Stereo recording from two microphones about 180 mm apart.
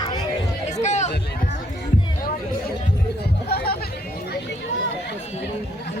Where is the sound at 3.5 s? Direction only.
60° left (ahead or behind).